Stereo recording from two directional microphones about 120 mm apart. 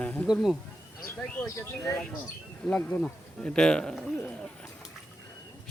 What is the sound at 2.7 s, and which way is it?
A man's voice, 10° left (ahead or behind).